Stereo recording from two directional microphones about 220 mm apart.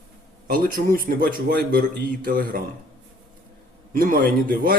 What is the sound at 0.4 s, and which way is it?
A man's voice, 40° right (ahead or behind).